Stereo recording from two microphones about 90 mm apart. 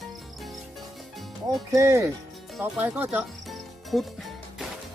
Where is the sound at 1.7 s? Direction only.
35° right (ahead or behind).